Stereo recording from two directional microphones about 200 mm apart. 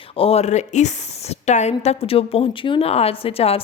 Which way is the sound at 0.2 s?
30° left (ahead or behind).